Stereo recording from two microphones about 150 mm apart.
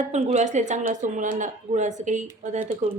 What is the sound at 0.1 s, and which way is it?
Speech, 50° right (ahead or behind).